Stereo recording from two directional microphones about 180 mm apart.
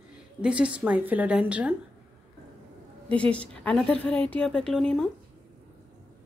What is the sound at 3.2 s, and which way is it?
A woman's voice, 5° left (ahead or behind).